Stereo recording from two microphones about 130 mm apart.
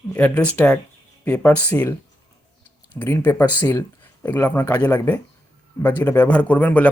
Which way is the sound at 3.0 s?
15° left (ahead or behind).